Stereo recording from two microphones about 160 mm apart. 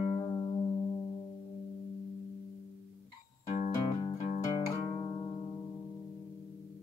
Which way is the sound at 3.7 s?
25° left (ahead or behind).